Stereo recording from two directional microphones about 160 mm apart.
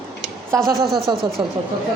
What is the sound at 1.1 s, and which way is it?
Speech, 25° right (ahead or behind).